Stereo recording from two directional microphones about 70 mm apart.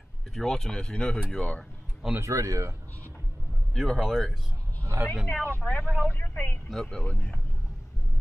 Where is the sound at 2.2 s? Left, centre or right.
Right.